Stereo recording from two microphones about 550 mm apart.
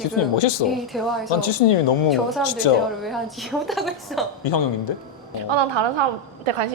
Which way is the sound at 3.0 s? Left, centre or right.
Centre.